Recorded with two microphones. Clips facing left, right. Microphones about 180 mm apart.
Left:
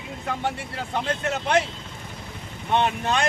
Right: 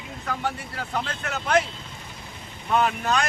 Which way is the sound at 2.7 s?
25° left (ahead or behind).